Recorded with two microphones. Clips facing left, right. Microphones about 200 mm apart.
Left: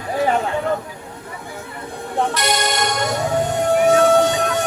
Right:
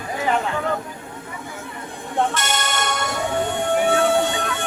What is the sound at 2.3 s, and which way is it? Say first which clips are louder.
Music: left 4 dB; 35° left (ahead or behind).